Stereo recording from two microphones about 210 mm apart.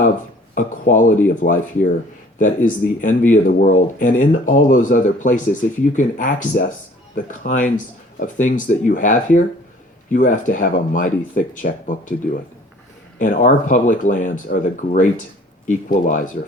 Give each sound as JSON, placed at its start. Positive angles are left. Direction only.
{"t": 0.5, "sound": "speech", "side_deg": 40}
{"t": 13.1, "sound": "speech", "side_deg": 35}